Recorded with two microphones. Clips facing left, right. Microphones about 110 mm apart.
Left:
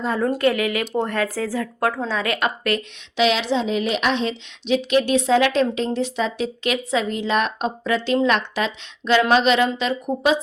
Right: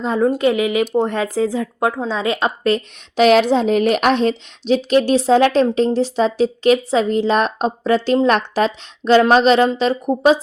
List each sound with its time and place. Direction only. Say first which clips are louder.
0.0 s speech: right 4 dB; 20° right (ahead or behind)
3.2 s speech: right 7 dB; 50° right (ahead or behind); by 10.4 s 35° right (ahead or behind)